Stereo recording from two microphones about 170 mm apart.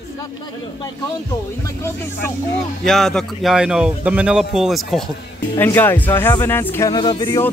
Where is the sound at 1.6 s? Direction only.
15° left (ahead or behind).